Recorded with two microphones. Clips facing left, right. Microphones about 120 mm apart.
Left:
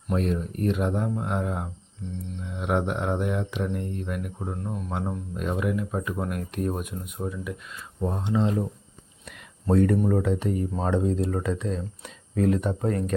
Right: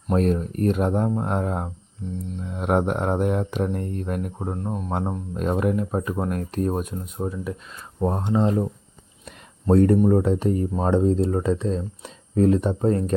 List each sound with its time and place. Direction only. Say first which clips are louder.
0.1 s speech: right 5 dB; 40° right (ahead or behind)
9.2 s a sound: right 5 dB; 35° right (ahead or behind)
10.0 s speech: right 5 dB; 30° right (ahead or behind)